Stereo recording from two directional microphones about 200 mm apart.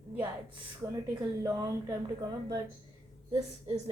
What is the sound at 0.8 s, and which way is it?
A woman's voice, 15° right (ahead or behind).